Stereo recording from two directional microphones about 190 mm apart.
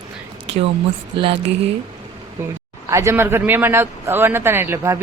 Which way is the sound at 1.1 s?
25° right (ahead or behind).